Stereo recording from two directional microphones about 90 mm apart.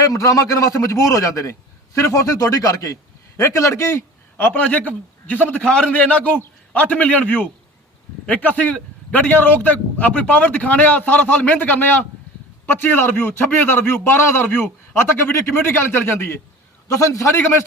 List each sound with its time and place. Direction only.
0.0 s a man's voice: 40° left (ahead or behind)